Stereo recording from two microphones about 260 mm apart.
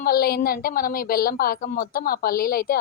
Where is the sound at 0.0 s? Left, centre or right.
Left.